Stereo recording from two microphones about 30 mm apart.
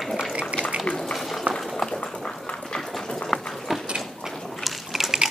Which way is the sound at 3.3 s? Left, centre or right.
Centre.